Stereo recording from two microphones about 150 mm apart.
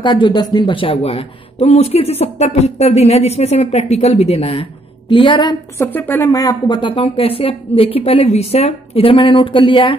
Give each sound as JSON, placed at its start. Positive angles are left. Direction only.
{"t": 0.0, "sound": "speech", "side_deg": 30}
{"t": 5.8, "sound": "speech", "side_deg": 15}